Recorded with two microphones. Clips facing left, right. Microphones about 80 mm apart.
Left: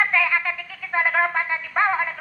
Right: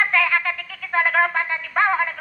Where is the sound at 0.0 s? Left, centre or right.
Centre.